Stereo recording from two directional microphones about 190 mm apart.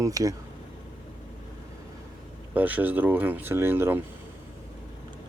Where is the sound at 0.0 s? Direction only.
20° right (ahead or behind).